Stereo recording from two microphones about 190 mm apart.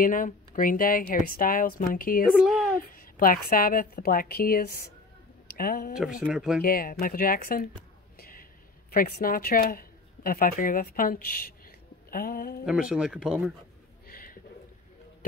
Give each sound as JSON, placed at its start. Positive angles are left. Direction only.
{"t": 0.0, "sound": "a woman's voice", "side_deg": 45}
{"t": 6.2, "sound": "speech", "side_deg": -5}
{"t": 6.6, "sound": "a woman's voice", "side_deg": 50}
{"t": 8.2, "sound": "a sound", "side_deg": 50}
{"t": 8.9, "sound": "speech", "side_deg": 50}
{"t": 12.9, "sound": "speech", "side_deg": -5}
{"t": 14.0, "sound": "pigeon", "side_deg": 50}